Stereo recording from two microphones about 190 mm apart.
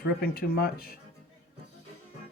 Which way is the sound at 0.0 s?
55° left (ahead or behind).